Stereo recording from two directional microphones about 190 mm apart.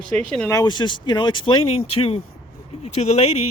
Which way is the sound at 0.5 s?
25° left (ahead or behind).